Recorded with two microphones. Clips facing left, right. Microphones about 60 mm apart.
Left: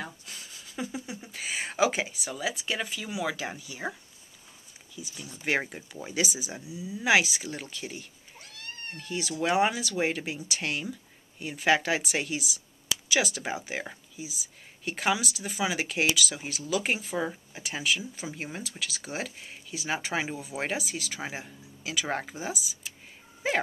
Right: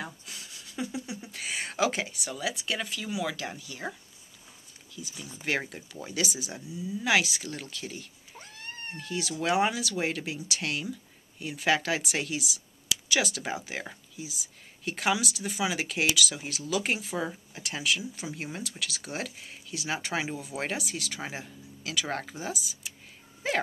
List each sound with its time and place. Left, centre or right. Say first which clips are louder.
0.0 s speech: even; centre
5.0 s speech: even; centre
8.4 s cat: right 1 dB; right
9.0 s speech: left 1 dB; centre